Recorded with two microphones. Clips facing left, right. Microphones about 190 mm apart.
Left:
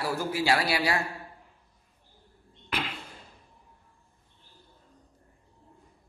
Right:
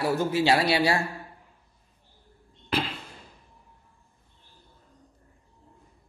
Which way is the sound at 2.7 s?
30° right (ahead or behind).